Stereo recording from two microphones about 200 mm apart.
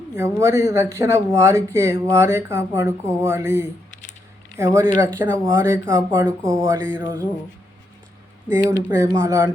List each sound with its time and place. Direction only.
0.2 s speech: 15° right (ahead or behind)
6.2 s speech: 5° left (ahead or behind)
6.6 s speech: 10° right (ahead or behind)
8.9 s speech: 15° right (ahead or behind)